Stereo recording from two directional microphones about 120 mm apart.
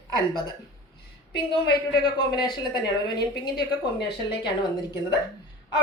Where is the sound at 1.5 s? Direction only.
35° left (ahead or behind).